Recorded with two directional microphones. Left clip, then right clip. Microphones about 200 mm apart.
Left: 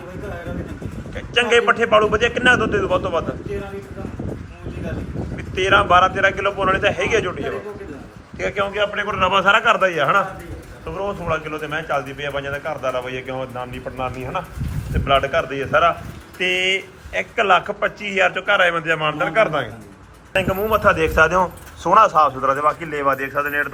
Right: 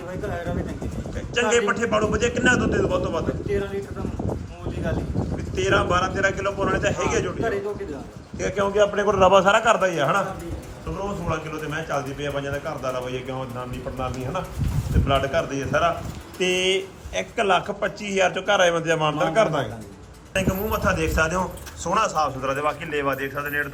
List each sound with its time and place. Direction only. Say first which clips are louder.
1.1 s a man's voice: left 5 dB; 5° right (ahead or behind)
5.5 s a man's voice: left 7 dB; 5° right (ahead or behind)
8.4 s a man's voice: even; 15° right (ahead or behind)
9.4 s a man's voice: left 3 dB; 15° right (ahead or behind)
16.4 s speech: left 3 dB; 65° right (ahead or behind)
17.2 s a man's voice: left 5 dB; 10° right (ahead or behind)
22.4 s a man's voice: left 6 dB; 15° right (ahead or behind)
22.7 s a man's voice: left 5 dB; centre (ahead or behind)